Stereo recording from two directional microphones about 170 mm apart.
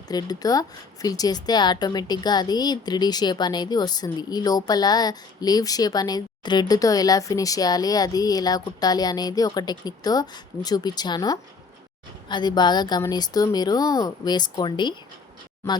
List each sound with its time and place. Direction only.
0.1 s a woman's voice: 20° left (ahead or behind)
15.6 s speech: 15° left (ahead or behind)